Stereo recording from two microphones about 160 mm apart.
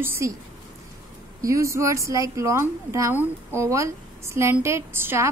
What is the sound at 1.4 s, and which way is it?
A woman's voice, 20° right (ahead or behind).